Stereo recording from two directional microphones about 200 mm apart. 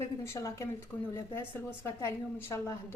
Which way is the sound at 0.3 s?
15° left (ahead or behind).